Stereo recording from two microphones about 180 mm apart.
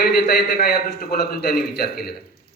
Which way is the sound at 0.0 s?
60° left (ahead or behind).